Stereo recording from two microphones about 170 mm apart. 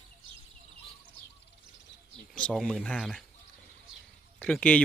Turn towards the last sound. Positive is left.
turn(degrees=5)  # may be behind; listen again after turning